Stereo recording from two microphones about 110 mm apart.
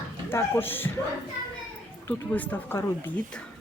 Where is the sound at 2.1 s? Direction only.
15° left (ahead or behind).